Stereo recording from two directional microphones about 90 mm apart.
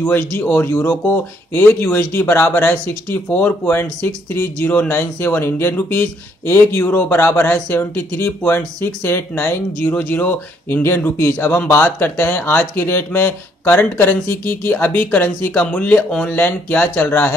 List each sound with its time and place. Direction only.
0.0 s speech: 25° left (ahead or behind)